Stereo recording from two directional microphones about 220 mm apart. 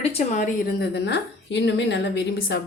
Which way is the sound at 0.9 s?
50° left (ahead or behind).